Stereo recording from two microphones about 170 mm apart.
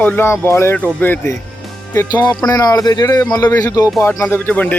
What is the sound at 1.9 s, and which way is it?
A man's voice, 25° left (ahead or behind).